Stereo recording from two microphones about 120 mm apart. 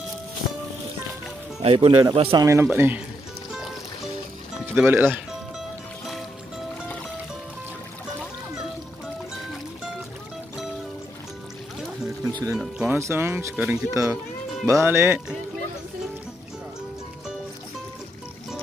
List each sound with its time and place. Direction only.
1.6 s speech: 50° right (ahead or behind)
1.9 s a man's voice: 35° right (ahead or behind)
2.1 s speech: 50° right (ahead or behind)
2.4 s speech: 25° right (ahead or behind)
4.6 s speech: 15° right (ahead or behind)
12.0 s music: 30° right (ahead or behind)
12.8 s speech: 20° right (ahead or behind)